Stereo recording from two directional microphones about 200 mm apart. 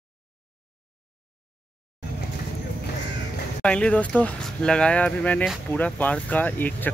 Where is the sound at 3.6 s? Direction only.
5° left (ahead or behind).